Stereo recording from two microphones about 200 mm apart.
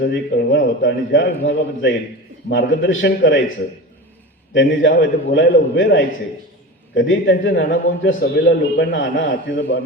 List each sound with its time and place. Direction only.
0.0 s a man's voice: 60° left (ahead or behind)
4.5 s a man's voice: 65° left (ahead or behind)